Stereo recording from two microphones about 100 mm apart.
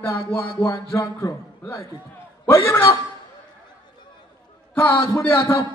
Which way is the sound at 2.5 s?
30° left (ahead or behind).